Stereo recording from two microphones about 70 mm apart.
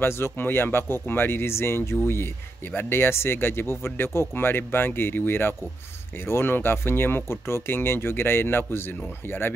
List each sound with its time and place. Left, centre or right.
0.0 s speech: left